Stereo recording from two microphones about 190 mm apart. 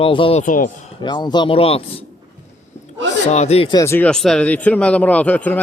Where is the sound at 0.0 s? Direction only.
30° left (ahead or behind).